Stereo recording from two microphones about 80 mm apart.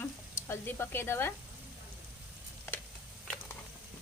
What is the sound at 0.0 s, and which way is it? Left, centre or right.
Speech, left.